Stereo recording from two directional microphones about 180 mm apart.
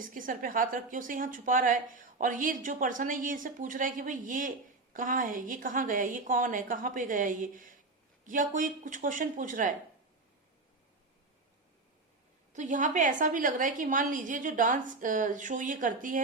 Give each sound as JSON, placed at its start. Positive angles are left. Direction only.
{"t": 0.0, "sound": "a woman's voice", "side_deg": -50}
{"t": 12.5, "sound": "a woman's voice", "side_deg": -45}